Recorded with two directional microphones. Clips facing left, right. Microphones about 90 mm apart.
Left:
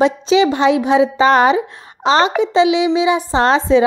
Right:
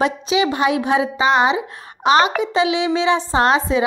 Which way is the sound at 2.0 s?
30° left (ahead or behind).